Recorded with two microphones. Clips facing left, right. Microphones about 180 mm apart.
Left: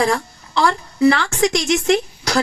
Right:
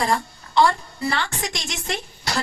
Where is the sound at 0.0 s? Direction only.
90° left.